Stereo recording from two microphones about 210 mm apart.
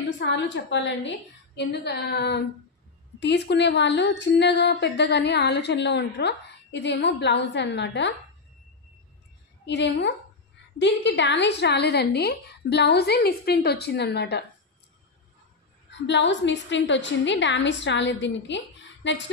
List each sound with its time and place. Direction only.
0.2 s speech: 55° left (ahead or behind)
9.7 s a woman's voice: 55° left (ahead or behind)
15.9 s speech: 60° left (ahead or behind)